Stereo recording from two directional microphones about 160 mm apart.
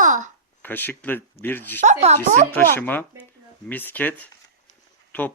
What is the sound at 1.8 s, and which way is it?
Speech, 45° right (ahead or behind).